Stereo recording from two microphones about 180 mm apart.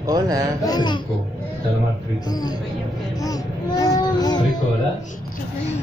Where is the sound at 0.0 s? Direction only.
20° right (ahead or behind).